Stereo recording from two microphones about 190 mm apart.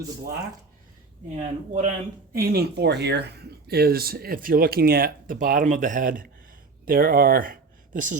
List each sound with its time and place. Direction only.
1.4 s speech: 35° right (ahead or behind)
2.3 s speech: 55° right (ahead or behind)